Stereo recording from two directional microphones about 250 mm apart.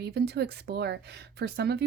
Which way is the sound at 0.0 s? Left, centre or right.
Right.